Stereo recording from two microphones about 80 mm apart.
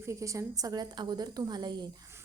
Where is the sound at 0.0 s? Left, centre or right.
Right.